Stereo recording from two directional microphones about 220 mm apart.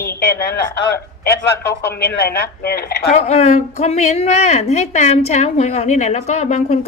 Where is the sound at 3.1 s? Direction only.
30° left (ahead or behind).